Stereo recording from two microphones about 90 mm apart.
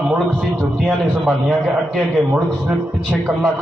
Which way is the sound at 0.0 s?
10° right (ahead or behind).